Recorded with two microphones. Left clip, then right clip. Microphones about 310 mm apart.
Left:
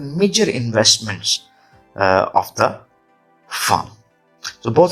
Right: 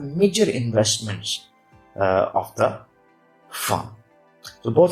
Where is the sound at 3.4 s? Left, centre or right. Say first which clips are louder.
Left 7 dB; left.